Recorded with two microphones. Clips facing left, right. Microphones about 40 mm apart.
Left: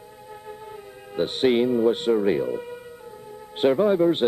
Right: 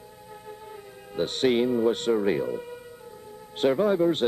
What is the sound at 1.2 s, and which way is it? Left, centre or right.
Speech, centre.